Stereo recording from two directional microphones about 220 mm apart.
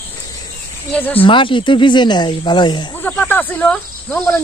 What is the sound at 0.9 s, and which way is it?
Speech, 10° left (ahead or behind).